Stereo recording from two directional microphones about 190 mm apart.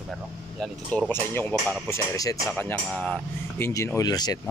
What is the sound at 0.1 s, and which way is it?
Speech, 5° left (ahead or behind).